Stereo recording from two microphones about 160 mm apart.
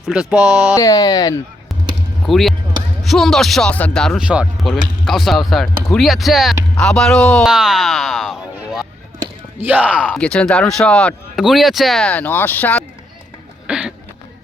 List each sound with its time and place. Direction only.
0.1 s speech: 5° right (ahead or behind)
0.7 s speech: 20° left (ahead or behind)
2.2 s speech: centre (ahead or behind)
10.2 s speech: 5° left (ahead or behind)
13.7 s speech: 5° right (ahead or behind)